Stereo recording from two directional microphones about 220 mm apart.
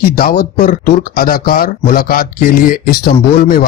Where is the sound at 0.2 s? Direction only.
40° left (ahead or behind).